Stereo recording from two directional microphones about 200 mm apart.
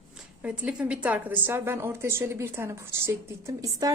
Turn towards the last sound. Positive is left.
turn(degrees=-15)  # may be behind; listen again after turning